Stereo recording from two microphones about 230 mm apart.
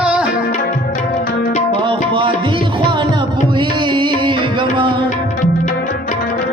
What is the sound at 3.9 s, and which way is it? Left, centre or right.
Music, right.